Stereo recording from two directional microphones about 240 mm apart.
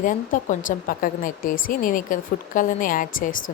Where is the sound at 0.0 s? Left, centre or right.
Left.